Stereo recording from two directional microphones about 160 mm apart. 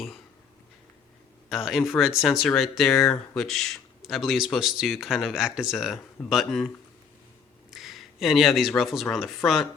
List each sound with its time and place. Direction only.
1.5 s a man's voice: centre (ahead or behind)
7.7 s speech: centre (ahead or behind)